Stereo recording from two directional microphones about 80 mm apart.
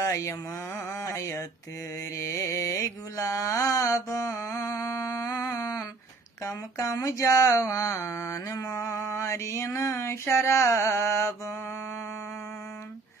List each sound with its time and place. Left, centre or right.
0.0 s a sound: left
2.0 s mantra: left
6.4 s speech: left